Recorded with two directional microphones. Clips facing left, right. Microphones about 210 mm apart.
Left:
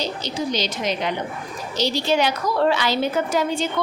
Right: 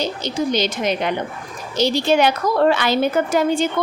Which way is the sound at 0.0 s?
55° right (ahead or behind).